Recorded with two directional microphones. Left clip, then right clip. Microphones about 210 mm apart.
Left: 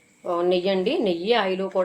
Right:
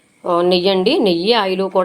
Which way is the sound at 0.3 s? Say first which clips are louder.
Right 8 dB; 45° right (ahead or behind).